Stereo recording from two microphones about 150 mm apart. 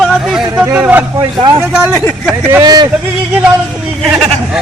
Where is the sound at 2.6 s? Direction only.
25° right (ahead or behind).